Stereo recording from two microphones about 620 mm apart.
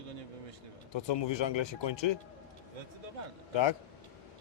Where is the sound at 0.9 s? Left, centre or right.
Left.